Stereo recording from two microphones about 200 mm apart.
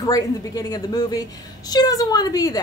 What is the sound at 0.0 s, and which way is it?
A woman's voice, 20° left (ahead or behind).